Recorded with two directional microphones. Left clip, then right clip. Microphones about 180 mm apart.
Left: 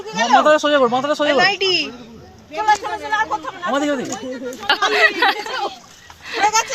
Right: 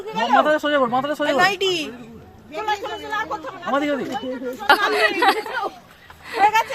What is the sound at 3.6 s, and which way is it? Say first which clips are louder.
Speech: left 2 dB; 35° left (ahead or behind).